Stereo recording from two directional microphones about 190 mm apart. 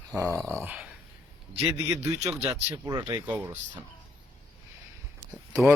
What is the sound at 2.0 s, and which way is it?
Speech, 10° right (ahead or behind).